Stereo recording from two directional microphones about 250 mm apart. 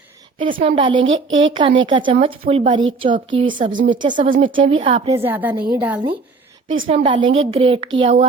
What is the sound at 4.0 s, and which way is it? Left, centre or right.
Speech, centre.